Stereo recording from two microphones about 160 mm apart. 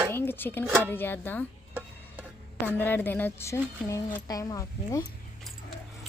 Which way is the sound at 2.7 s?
10° left (ahead or behind).